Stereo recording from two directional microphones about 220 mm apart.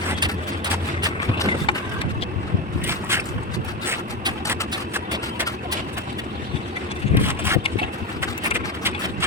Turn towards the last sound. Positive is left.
turn(degrees=-10)  # may be behind; listen again after turning